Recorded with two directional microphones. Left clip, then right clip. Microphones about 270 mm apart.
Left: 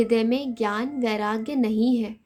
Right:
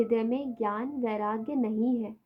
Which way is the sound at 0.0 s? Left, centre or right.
Left.